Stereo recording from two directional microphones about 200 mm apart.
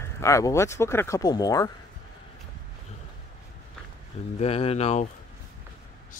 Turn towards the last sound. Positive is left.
turn(degrees=35)  # may be behind; listen again after turning